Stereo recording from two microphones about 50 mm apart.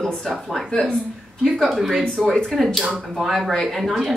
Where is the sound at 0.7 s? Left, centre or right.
Centre.